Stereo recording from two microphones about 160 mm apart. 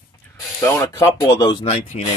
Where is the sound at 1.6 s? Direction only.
50° left (ahead or behind).